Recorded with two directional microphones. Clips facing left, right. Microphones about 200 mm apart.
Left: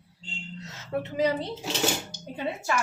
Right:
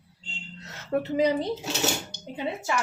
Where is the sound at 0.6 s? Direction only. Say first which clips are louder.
Left 1 dB; 60° right (ahead or behind).